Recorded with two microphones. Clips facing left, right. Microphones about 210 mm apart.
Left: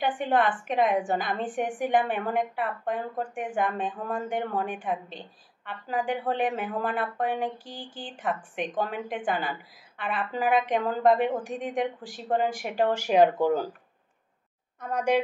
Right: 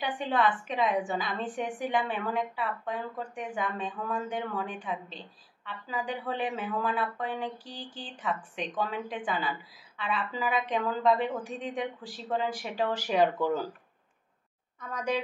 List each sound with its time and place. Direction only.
0.0 s a woman's voice: 50° left (ahead or behind)
14.8 s a woman's voice: 60° left (ahead or behind)